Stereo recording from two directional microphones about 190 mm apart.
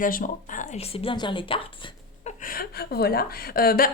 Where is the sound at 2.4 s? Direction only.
50° left (ahead or behind).